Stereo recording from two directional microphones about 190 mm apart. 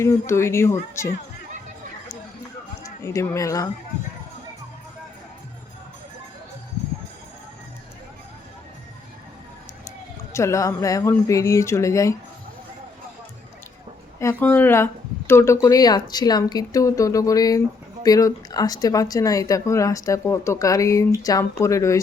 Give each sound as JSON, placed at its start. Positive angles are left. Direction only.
{"t": 0.0, "sound": "speech", "side_deg": 15}
{"t": 2.8, "sound": "a woman's voice", "side_deg": 15}
{"t": 10.3, "sound": "speech", "side_deg": 15}
{"t": 14.2, "sound": "speech", "side_deg": 10}